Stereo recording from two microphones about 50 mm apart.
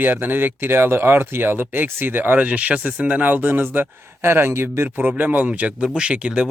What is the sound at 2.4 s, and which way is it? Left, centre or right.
Speech, right.